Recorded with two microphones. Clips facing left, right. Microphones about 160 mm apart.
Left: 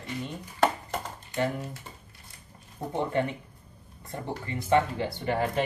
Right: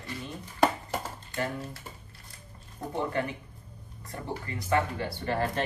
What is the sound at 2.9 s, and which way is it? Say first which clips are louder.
Speech: left 3 dB; 25° left (ahead or behind).